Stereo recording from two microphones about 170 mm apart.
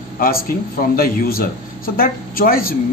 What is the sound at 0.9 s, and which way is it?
A man's voice, 60° left (ahead or behind).